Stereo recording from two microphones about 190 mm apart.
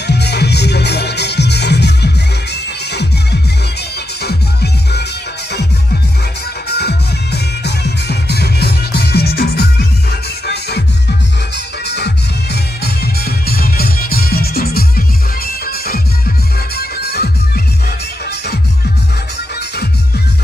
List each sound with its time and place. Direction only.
0.0 s music: 60° left (ahead or behind)
6.7 s music: 60° left (ahead or behind)